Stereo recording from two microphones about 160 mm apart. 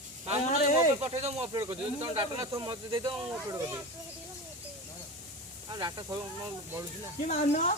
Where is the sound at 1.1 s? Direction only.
40° right (ahead or behind).